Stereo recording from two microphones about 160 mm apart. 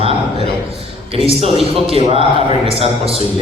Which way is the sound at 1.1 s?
35° right (ahead or behind).